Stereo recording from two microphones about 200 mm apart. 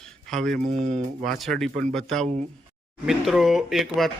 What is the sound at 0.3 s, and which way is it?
Speech, centre (ahead or behind).